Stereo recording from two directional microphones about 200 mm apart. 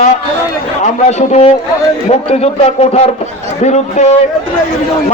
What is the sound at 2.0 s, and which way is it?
A man's voice, 30° left (ahead or behind).